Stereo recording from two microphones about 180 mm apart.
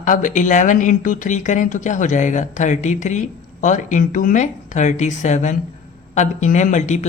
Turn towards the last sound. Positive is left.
turn(degrees=40)  # may be behind; listen again after turning